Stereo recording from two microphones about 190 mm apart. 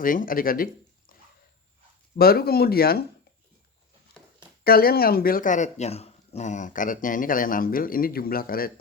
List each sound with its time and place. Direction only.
0.0 s speech: 45° left (ahead or behind)
2.1 s speech: 55° left (ahead or behind)
4.6 s speech: 50° left (ahead or behind)